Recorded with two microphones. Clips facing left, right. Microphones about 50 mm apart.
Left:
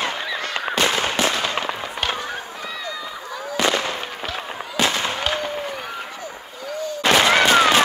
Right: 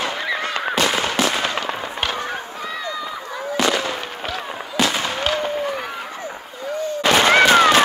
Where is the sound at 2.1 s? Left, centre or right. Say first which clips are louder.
Right 2 dB; right.